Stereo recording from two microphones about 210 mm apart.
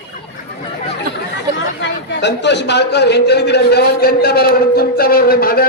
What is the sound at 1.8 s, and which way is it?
A man's voice, 55° left (ahead or behind).